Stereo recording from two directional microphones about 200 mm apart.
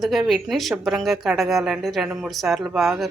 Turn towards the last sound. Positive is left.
turn(degrees=0)  # may be behind; listen again after turning